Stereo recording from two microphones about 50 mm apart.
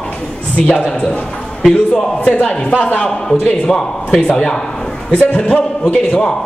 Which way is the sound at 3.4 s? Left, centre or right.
Centre.